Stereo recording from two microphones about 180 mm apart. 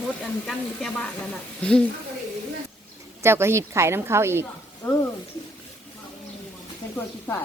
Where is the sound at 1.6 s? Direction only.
5° left (ahead or behind).